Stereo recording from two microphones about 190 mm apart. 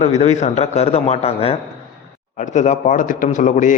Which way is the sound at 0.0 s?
35° left (ahead or behind).